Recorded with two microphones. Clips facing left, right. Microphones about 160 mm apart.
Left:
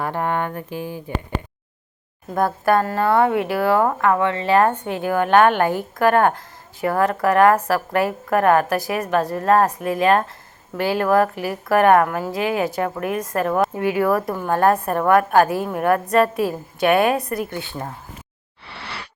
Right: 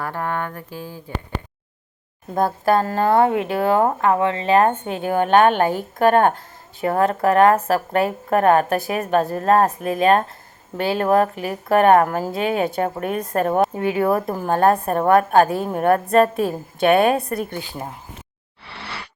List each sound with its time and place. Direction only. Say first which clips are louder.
0.0 s speech: left 3 dB; 20° left (ahead or behind)
2.3 s a woman's voice: even; 25° right (ahead or behind)